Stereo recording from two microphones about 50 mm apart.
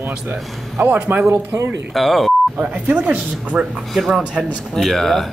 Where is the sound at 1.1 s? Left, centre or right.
Right.